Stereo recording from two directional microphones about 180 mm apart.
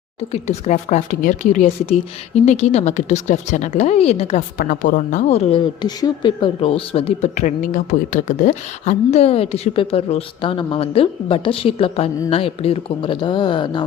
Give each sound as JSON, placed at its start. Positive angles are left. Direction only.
{"t": 0.2, "sound": "speech", "side_deg": 35}
{"t": 4.5, "sound": "speech", "side_deg": 50}